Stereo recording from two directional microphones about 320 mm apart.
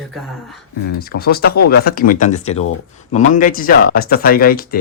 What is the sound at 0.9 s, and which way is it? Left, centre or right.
Speech, left.